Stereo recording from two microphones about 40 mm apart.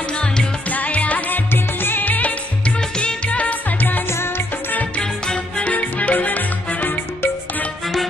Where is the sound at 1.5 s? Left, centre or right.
Left.